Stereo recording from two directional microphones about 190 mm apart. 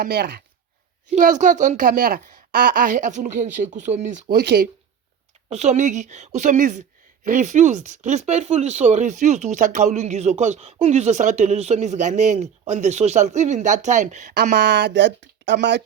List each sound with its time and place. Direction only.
0.0 s speech: 60° right (ahead or behind)
1.1 s a woman's voice: 40° right (ahead or behind)
4.4 s speech: 60° right (ahead or behind)
5.5 s speech: 35° right (ahead or behind)
14.5 s speech: 65° right (ahead or behind)